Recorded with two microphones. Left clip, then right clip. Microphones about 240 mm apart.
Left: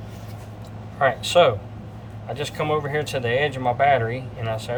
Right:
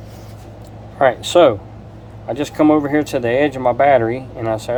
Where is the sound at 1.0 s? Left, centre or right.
Right.